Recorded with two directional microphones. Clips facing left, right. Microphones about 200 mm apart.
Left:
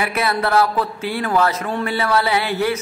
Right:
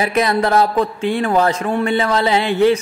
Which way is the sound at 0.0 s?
20° right (ahead or behind).